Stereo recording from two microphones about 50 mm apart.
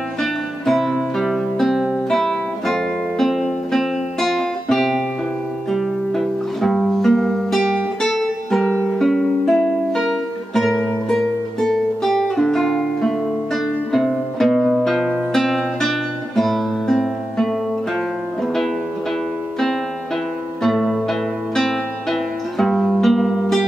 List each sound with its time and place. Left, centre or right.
0.2 s music: centre
4.2 s guitar: centre
5.7 s music: centre
20.6 s music: centre